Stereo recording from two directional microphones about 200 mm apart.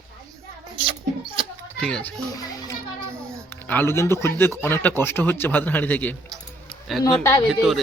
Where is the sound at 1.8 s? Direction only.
5° left (ahead or behind).